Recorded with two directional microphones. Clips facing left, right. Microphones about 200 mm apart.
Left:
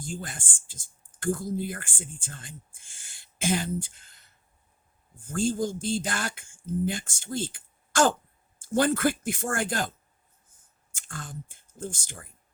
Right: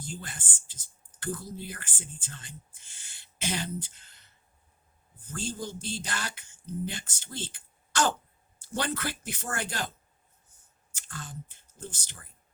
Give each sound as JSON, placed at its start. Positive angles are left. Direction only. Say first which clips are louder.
{"t": 0.0, "sound": "speech", "louder": "left 4 dB", "side_deg": 50}
{"t": 5.2, "sound": "speech", "louder": "left 9 dB", "side_deg": 50}
{"t": 10.9, "sound": "speech", "louder": "left 3 dB", "side_deg": 50}